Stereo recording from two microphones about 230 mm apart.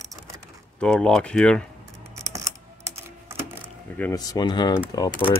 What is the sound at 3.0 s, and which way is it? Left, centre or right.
Typing, centre.